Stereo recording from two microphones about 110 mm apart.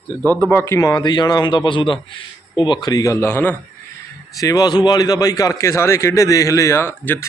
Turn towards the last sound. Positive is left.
turn(degrees=20)  # may be behind; listen again after turning